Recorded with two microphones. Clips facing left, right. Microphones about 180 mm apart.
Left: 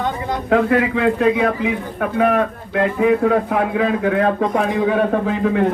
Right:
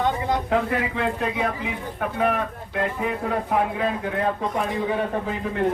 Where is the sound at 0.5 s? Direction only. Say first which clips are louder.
Left 12 dB; 90° left.